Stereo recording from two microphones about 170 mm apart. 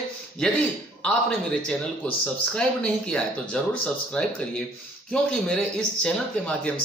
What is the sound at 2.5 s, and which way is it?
A man's voice, 5° left (ahead or behind).